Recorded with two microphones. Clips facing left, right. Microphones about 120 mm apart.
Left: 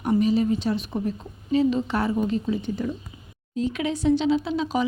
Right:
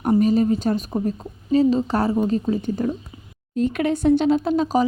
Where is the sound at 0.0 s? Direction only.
45° right (ahead or behind).